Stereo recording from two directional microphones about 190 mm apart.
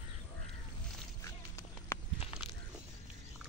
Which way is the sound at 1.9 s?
15° left (ahead or behind).